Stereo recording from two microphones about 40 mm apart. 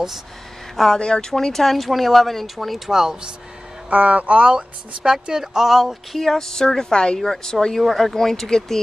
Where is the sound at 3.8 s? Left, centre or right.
Right.